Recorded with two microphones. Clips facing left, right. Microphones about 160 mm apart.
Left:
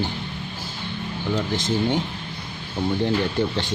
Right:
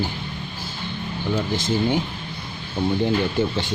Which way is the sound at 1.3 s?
5° right (ahead or behind).